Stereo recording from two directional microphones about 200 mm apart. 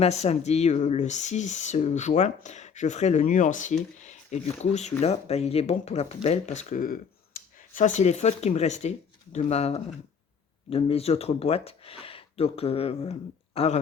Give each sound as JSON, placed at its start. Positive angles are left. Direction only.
{"t": 0.0, "sound": "speech", "side_deg": 30}